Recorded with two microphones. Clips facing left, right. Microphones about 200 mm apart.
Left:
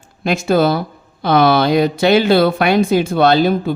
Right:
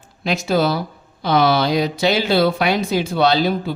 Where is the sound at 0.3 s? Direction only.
50° left (ahead or behind).